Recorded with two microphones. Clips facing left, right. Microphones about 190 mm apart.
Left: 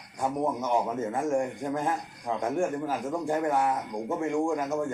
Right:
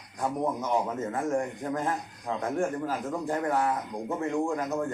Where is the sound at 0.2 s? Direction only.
10° left (ahead or behind).